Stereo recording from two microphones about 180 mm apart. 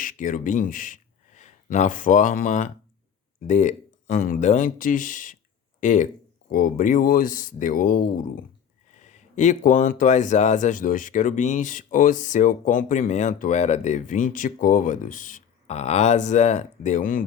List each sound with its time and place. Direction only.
0.0 s speech: 50° left (ahead or behind)